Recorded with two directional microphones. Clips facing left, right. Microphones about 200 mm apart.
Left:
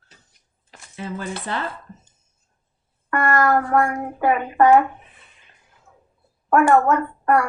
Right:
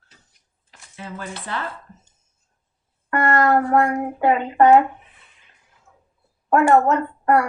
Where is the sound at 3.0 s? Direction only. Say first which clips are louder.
Right 1 dB; 25° right (ahead or behind).